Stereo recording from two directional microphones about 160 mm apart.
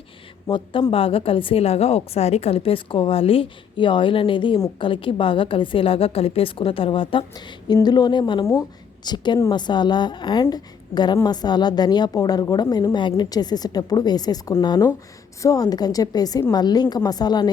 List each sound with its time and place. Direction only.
0.4 s a woman's voice: 30° left (ahead or behind)